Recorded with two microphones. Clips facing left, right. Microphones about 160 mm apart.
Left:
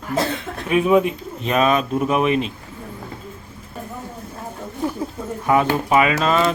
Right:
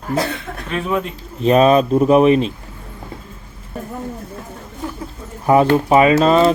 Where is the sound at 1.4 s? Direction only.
35° right (ahead or behind).